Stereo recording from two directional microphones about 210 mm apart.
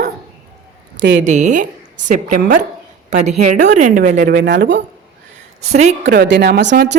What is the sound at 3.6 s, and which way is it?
Speech, 35° right (ahead or behind).